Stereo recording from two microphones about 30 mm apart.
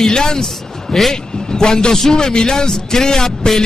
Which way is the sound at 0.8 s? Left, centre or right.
Centre.